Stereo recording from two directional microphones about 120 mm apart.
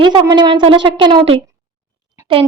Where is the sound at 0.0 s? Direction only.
40° right (ahead or behind).